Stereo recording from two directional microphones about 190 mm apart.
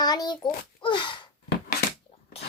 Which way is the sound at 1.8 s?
55° left (ahead or behind).